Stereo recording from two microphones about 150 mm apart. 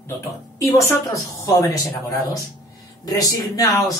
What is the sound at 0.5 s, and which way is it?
Speech, 20° left (ahead or behind).